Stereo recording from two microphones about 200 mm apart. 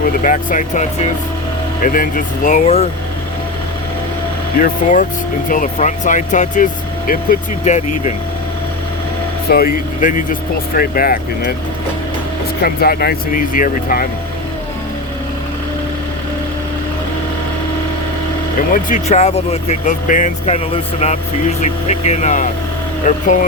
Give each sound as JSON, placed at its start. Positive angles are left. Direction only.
{"t": 0.0, "sound": "speech", "side_deg": 40}
{"t": 4.5, "sound": "speech", "side_deg": 40}
{"t": 9.5, "sound": "speech", "side_deg": 50}
{"t": 12.6, "sound": "speech", "side_deg": 50}
{"t": 18.7, "sound": "speech", "side_deg": 40}